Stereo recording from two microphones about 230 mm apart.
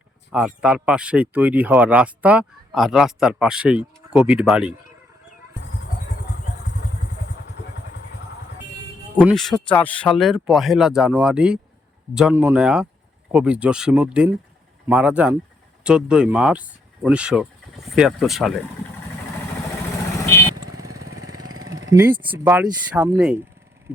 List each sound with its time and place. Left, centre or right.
0.3 s speech: centre
9.1 s speech: centre
20.7 s lawn mower: right
21.3 s vehicle: centre
21.6 s vehicle: right
22.2 s speech: centre